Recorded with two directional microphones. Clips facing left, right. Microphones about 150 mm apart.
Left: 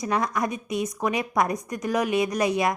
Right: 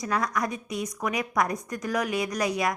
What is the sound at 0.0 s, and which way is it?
A woman's voice, 25° left (ahead or behind).